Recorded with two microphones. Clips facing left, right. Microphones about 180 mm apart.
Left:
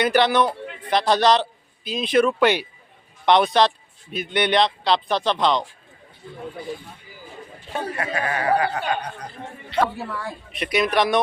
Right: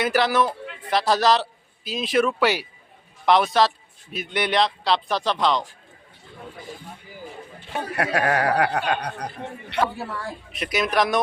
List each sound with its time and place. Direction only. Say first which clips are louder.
0.0 s a man's voice: left 2 dB; centre (ahead or behind)
7.9 s speech: right 7 dB; 70° right (ahead or behind)
10.2 s speech: left 1 dB; centre (ahead or behind)